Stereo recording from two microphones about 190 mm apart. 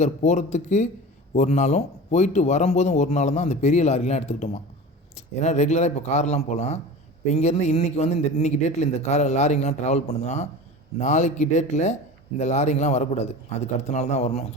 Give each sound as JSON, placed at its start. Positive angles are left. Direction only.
{"t": 0.0, "sound": "a man's voice", "side_deg": 40}